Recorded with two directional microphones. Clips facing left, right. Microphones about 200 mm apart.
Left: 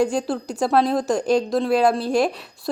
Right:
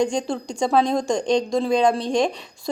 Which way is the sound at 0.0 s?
5° left (ahead or behind).